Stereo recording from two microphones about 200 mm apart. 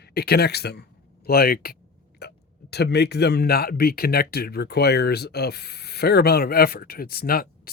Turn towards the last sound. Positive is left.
turn(degrees=50)  # may be behind; listen again after turning